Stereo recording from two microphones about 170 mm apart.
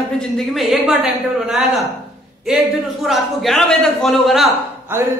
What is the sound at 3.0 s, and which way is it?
A man's voice, centre (ahead or behind).